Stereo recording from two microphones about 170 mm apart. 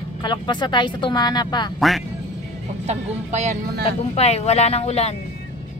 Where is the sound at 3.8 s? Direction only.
40° left (ahead or behind).